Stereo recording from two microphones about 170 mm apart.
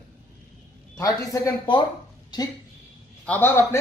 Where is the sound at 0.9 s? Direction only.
20° left (ahead or behind).